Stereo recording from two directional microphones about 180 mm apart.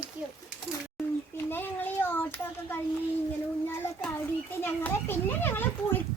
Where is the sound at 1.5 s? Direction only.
10° left (ahead or behind).